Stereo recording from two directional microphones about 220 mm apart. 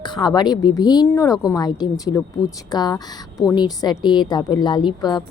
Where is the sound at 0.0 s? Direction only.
20° left (ahead or behind).